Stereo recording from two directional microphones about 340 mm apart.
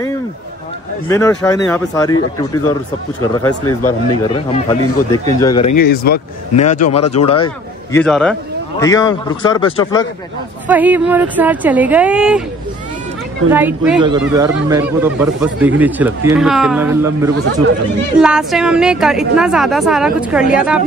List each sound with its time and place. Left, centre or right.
1.0 s a man's voice: centre
3.4 s a man's voice: centre
5.8 s a man's voice: left
8.0 s a man's voice: centre
10.7 s speech: centre
13.5 s speech: centre